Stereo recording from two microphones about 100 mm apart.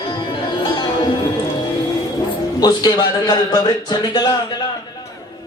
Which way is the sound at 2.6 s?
40° left (ahead or behind).